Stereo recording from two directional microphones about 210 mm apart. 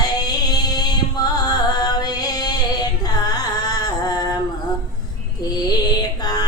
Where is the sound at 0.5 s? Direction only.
20° left (ahead or behind).